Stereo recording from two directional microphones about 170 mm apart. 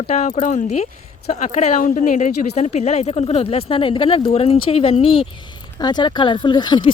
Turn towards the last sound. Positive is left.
turn(degrees=25)  # may be behind; listen again after turning